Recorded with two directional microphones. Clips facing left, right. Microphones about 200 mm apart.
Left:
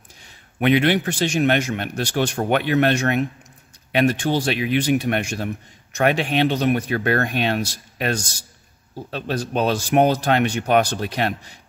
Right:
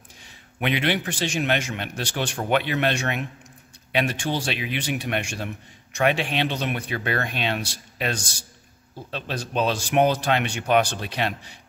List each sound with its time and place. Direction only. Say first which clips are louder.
0.6 s a man's voice: left 7 dB; 50° left (ahead or behind)
9.1 s a man's voice: left 4 dB; 45° left (ahead or behind)